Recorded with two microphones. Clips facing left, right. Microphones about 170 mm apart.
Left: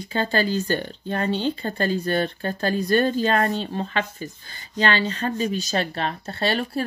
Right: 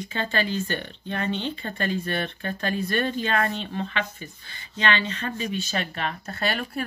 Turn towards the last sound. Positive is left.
turn(degrees=30)  # may be behind; listen again after turning